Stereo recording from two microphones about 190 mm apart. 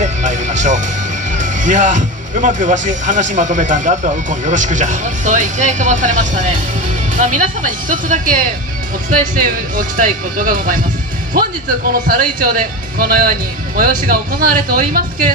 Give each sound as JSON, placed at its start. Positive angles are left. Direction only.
{"t": 0.0, "sound": "music", "side_deg": -40}
{"t": 1.3, "sound": "speech", "side_deg": -40}
{"t": 12.1, "sound": "speech", "side_deg": -45}